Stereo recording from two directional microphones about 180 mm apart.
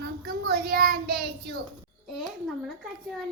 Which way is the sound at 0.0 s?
60° right (ahead or behind).